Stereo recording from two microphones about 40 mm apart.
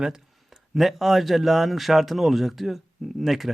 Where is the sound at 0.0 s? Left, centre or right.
Centre.